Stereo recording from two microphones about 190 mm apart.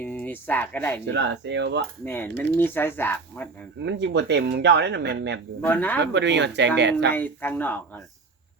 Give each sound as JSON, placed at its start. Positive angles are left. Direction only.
{"t": 0.0, "sound": "speech", "side_deg": 10}
{"t": 1.0, "sound": "speech", "side_deg": -65}
{"t": 2.0, "sound": "speech", "side_deg": 10}
{"t": 3.8, "sound": "speech", "side_deg": -65}
{"t": 5.6, "sound": "speech", "side_deg": 10}
{"t": 6.0, "sound": "speech", "side_deg": -65}
{"t": 7.1, "sound": "speech", "side_deg": 10}